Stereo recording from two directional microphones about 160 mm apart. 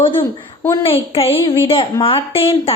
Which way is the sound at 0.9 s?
35° left (ahead or behind).